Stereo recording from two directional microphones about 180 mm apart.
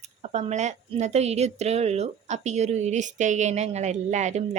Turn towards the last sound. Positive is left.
turn(degrees=-40)  # may be behind; listen again after turning